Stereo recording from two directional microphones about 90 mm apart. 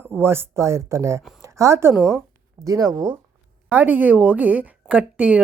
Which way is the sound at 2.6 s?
40° right (ahead or behind).